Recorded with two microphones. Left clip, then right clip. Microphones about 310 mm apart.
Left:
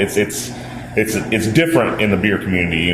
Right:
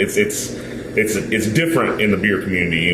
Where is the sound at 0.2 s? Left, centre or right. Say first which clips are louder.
Even; left.